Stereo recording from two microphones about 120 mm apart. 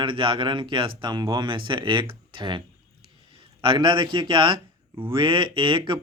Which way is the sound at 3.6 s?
40° right (ahead or behind).